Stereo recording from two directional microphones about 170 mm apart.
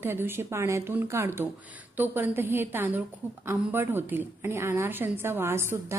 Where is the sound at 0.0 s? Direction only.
15° right (ahead or behind).